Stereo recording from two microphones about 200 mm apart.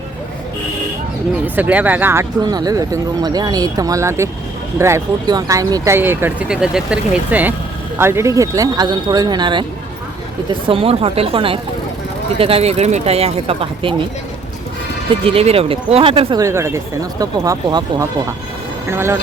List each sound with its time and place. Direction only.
1.5 s speech: 10° right (ahead or behind); by 13.9 s 30° right (ahead or behind)
15.2 s speech: 30° right (ahead or behind); by 19.2 s 10° right (ahead or behind)